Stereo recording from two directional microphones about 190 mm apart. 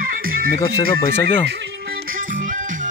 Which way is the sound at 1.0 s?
10° left (ahead or behind).